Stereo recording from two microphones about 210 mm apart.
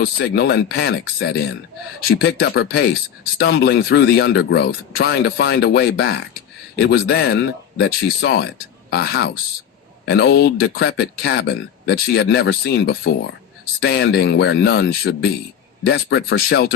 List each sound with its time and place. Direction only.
0.0 s speech: 50° left (ahead or behind)
15.9 s speech: 60° left (ahead or behind)